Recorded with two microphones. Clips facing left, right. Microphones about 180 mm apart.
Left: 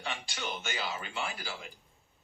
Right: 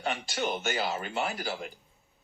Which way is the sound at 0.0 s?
45° right (ahead or behind).